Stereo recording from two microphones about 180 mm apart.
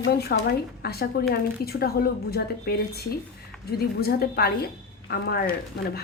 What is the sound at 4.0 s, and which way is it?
A woman's voice, 60° left (ahead or behind).